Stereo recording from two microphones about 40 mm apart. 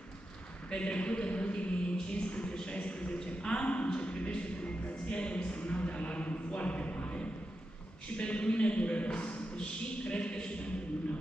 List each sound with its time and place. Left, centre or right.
0.7 s a woman's voice: left
2.0 s a sound: left
2.5 s a woman's voice: left